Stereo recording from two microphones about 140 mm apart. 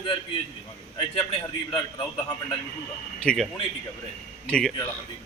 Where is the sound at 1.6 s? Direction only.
35° left (ahead or behind).